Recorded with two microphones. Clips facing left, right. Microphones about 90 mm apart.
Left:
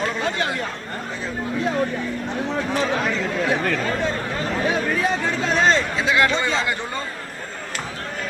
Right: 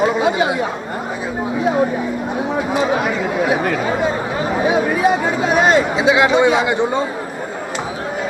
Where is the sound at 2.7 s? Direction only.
10° right (ahead or behind).